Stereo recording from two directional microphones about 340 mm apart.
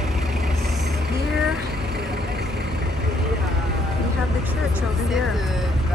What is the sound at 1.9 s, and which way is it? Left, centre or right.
Vehicle, right.